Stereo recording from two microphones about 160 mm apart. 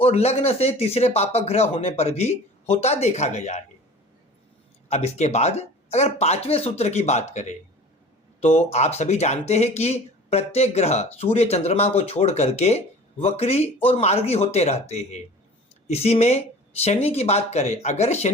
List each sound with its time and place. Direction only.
0.0 s a man's voice: 40° left (ahead or behind)
4.9 s speech: 45° left (ahead or behind)